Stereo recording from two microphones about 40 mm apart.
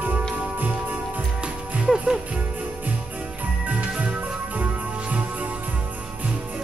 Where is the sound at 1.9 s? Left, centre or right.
Right.